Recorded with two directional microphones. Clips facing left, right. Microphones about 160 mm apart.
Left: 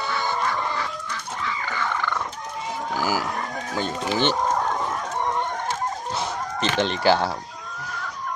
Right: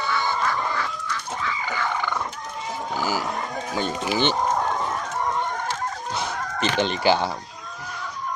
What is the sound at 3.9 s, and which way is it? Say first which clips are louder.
Speech: even; 10° right (ahead or behind).